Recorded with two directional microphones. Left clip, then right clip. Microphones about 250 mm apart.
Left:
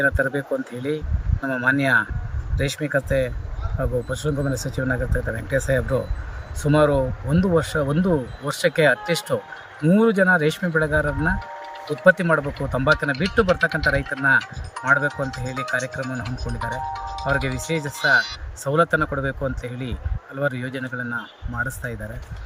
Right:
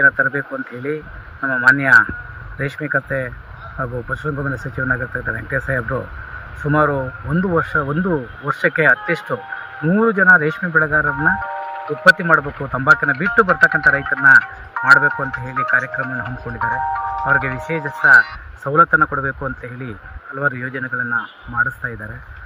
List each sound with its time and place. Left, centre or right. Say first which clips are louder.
0.0 s speech: right 7 dB; centre
17.2 s speech: right 5 dB; centre